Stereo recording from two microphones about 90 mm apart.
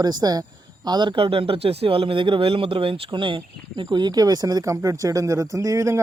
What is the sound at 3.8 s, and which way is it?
Speech, 50° right (ahead or behind).